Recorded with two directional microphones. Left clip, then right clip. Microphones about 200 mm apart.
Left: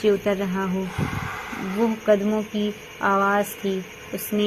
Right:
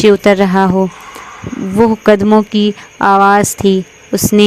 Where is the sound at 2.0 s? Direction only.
55° right (ahead or behind).